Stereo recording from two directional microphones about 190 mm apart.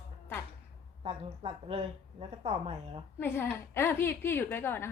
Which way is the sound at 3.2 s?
10° left (ahead or behind).